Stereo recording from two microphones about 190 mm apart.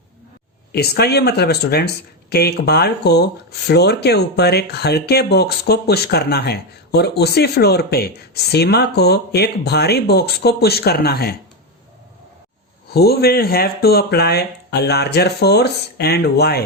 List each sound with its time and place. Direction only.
0.7 s speech: 55° left (ahead or behind)
12.9 s speech: 55° left (ahead or behind)